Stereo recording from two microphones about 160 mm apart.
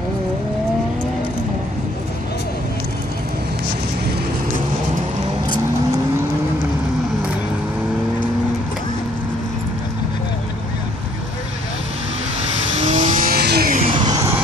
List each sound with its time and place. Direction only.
12.8 s vehicle: 50° right (ahead or behind); by 13.7 s 80° right
13.7 s vehicle: 35° right (ahead or behind)